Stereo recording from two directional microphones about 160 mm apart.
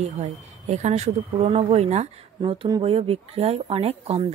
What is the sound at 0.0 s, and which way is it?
A child's voice, 45° right (ahead or behind).